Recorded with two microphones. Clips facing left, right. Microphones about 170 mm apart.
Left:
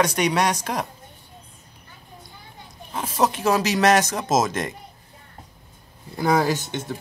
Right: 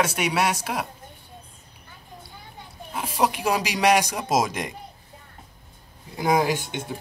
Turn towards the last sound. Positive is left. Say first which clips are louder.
# left 1 dB
turn(degrees=-10)  # may be behind; listen again after turning